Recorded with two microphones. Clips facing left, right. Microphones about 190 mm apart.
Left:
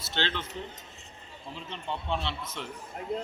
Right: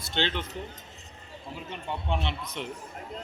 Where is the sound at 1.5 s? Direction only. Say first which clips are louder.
Right 1 dB; 10° right (ahead or behind).